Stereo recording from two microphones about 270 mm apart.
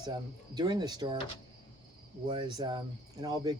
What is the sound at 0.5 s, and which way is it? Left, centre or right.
Speech, centre.